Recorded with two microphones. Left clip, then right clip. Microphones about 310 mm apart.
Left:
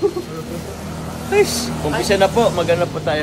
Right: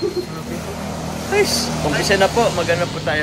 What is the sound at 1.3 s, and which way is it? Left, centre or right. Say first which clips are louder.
Speech: left 1 dB; centre.